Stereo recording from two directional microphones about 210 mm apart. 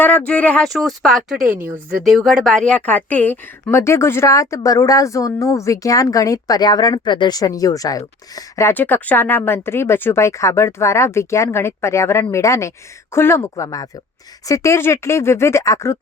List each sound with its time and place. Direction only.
0.0 s speech: 10° left (ahead or behind)
1.4 s a woman's voice: 40° right (ahead or behind)
1.6 s speech: 10° right (ahead or behind); by 16.0 s 15° left (ahead or behind)